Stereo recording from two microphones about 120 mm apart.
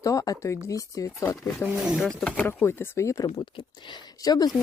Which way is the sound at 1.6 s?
10° right (ahead or behind).